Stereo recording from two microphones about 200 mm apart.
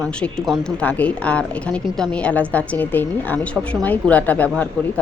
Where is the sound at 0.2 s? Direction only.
Centre (ahead or behind).